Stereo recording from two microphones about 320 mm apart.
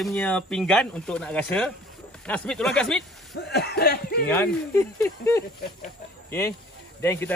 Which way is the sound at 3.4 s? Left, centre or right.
Left.